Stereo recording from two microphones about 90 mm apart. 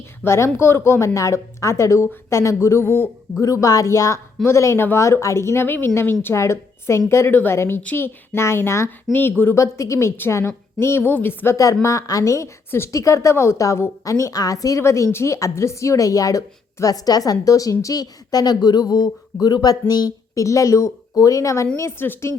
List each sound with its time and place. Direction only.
0.3 s a woman's voice: 30° left (ahead or behind)
3.4 s a woman's voice: 40° left (ahead or behind)
21.8 s speech: 25° left (ahead or behind)